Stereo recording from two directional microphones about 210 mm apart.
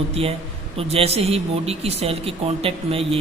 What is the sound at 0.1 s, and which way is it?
A man's voice, 25° right (ahead or behind).